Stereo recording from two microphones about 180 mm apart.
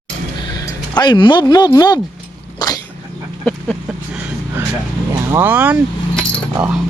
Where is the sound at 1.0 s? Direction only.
25° left (ahead or behind).